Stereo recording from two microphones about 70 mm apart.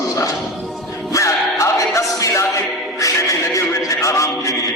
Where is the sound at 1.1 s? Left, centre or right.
Left.